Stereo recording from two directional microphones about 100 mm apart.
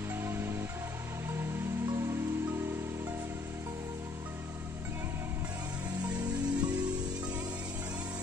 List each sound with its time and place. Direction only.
0.1 s music: 25° right (ahead or behind)
1.9 s music: 30° right (ahead or behind)
6.0 s music: 10° right (ahead or behind)